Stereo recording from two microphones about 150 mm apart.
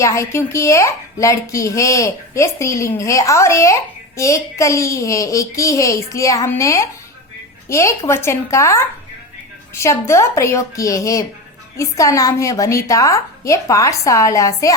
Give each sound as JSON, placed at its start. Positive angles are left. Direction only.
{"t": 0.0, "sound": "a woman's voice", "side_deg": 20}